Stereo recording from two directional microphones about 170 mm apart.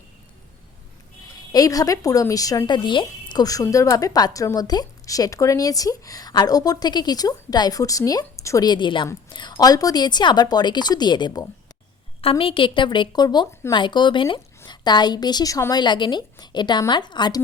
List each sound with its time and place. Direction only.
1.5 s speech: 20° left (ahead or behind)
13.7 s speech: 25° left (ahead or behind)